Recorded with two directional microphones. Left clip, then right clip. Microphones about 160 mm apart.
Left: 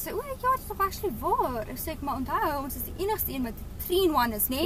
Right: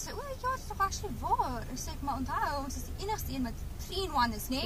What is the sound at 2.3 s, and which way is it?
Speech, 50° left (ahead or behind).